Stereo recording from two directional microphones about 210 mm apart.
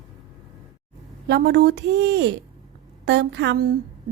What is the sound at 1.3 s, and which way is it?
A woman's voice, 50° right (ahead or behind).